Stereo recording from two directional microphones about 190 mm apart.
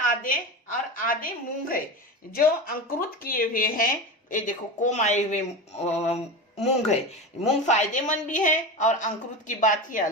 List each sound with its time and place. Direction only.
0.0 s a woman's voice: 45° left (ahead or behind)